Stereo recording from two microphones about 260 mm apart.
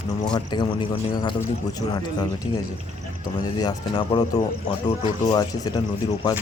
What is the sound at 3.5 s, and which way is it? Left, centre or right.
Speech, centre.